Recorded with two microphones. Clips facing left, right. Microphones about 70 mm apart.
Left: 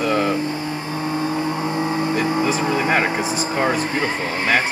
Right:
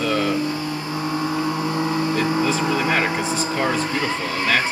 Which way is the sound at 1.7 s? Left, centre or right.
Centre.